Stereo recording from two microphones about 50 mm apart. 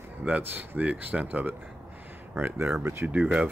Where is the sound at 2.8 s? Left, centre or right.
Right.